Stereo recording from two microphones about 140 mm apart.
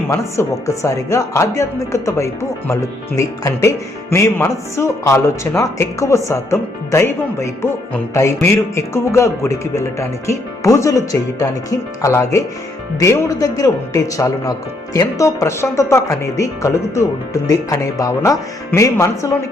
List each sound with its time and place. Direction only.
0.1 s speech: 20° left (ahead or behind)